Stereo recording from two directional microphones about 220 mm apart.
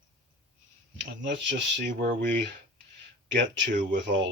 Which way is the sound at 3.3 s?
55° right (ahead or behind).